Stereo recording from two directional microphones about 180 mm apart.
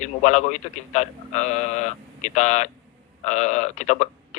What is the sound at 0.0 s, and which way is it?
A man's voice, 40° left (ahead or behind).